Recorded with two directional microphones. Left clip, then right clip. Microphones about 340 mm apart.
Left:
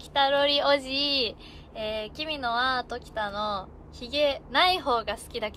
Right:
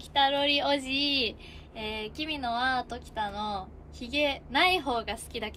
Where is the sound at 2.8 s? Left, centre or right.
Centre.